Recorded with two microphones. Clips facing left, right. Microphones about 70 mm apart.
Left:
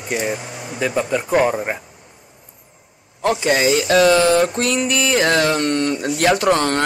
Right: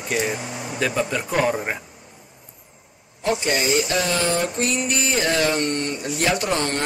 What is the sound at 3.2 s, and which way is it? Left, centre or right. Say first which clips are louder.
Speech: left 5 dB; left.